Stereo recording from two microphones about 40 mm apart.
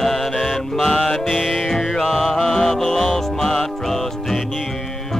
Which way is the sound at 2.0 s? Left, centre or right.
Centre.